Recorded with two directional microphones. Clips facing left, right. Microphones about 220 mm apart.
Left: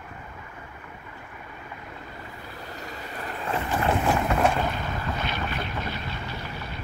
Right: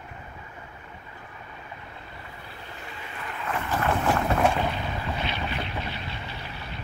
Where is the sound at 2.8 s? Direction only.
40° left (ahead or behind).